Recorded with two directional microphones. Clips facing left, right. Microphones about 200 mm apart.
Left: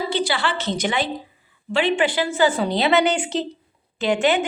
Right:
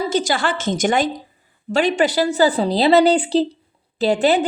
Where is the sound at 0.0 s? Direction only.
45° right (ahead or behind).